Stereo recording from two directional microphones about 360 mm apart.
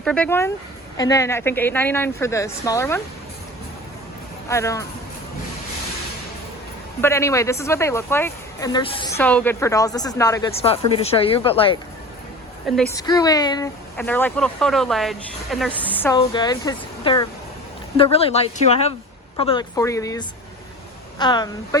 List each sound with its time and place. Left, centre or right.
0.0 s speech: centre
4.4 s speech: centre
7.0 s speech: centre
12.9 s speech: centre